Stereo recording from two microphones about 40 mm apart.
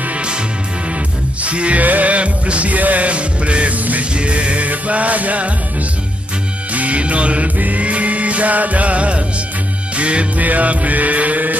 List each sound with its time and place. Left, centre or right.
1.4 s music: right
6.7 s music: right
10.4 s music: right